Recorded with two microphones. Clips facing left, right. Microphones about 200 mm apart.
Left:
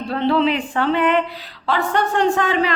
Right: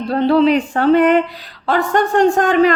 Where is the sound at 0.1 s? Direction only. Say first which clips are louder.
Right 5 dB; 40° right (ahead or behind).